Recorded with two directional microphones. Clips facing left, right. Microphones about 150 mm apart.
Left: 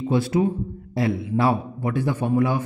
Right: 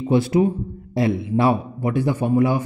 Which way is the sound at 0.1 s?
15° right (ahead or behind).